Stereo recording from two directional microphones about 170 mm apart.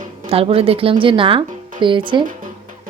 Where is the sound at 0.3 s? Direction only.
35° right (ahead or behind).